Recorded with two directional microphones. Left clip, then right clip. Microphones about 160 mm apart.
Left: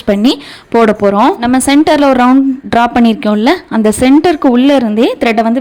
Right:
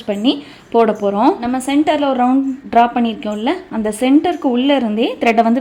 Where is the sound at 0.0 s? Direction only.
45° left (ahead or behind).